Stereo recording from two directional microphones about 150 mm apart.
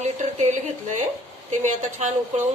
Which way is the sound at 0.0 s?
50° right (ahead or behind).